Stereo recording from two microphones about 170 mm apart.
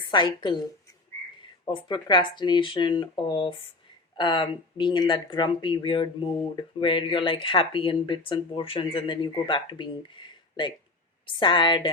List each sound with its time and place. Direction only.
0.1 s speech: 25° left (ahead or behind)
1.6 s speech: 25° left (ahead or behind)